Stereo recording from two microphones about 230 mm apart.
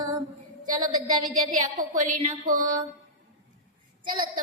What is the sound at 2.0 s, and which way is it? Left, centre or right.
Speech, right.